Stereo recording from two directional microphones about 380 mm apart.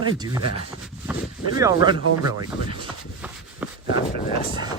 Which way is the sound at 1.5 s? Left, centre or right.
Centre.